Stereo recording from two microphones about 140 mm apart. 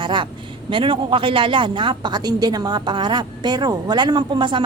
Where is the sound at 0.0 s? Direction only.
35° right (ahead or behind).